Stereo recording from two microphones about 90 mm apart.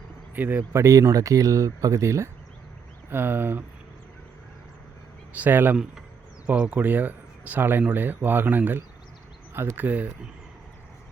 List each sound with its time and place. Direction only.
0.3 s speech: 20° right (ahead or behind)
0.7 s speech: 35° right (ahead or behind)
3.1 s speech: 25° right (ahead or behind)
5.3 s speech: 20° right (ahead or behind)